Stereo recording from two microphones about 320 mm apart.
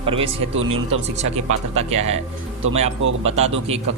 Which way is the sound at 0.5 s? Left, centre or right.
Right.